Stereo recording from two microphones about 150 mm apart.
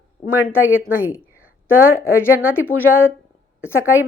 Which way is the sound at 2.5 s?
15° left (ahead or behind).